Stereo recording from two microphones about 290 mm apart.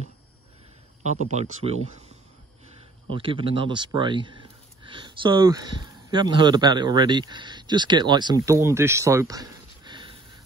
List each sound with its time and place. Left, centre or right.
1.0 s speech: right
3.1 s speech: centre